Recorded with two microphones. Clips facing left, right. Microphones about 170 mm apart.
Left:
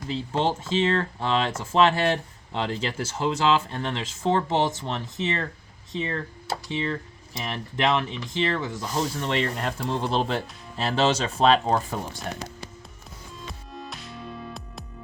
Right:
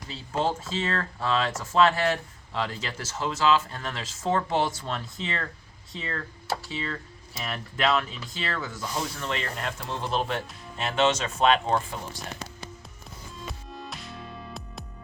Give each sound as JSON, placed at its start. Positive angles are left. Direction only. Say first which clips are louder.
{"t": 0.1, "sound": "speech", "louder": "left 3 dB", "side_deg": 25}
{"t": 13.5, "sound": "music", "louder": "left 1 dB", "side_deg": 0}